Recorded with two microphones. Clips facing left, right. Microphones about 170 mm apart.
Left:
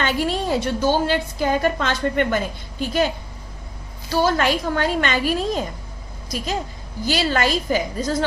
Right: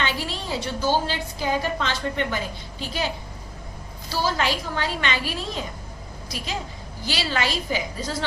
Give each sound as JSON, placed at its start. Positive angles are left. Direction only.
{"t": 0.0, "sound": "a woman's voice", "side_deg": 50}
{"t": 4.1, "sound": "a woman's voice", "side_deg": 55}